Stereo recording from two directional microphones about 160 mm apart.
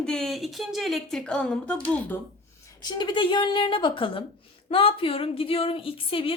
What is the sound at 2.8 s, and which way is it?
Speech, 30° left (ahead or behind).